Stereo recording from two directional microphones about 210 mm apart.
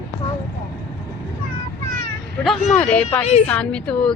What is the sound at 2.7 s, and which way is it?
A woman's voice, 5° left (ahead or behind).